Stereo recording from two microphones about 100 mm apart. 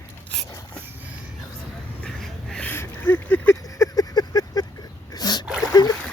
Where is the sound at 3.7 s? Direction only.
35° left (ahead or behind).